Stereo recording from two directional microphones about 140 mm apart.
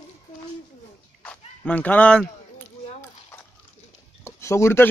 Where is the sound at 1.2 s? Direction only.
10° left (ahead or behind).